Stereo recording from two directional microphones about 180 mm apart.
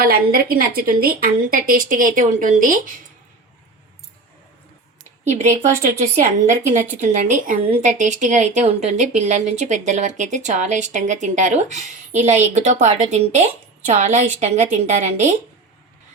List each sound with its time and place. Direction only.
0.0 s a woman's voice: 55° right (ahead or behind)
5.2 s a woman's voice: 40° right (ahead or behind)